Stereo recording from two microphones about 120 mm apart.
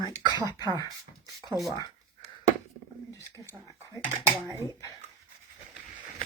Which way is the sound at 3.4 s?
10° right (ahead or behind).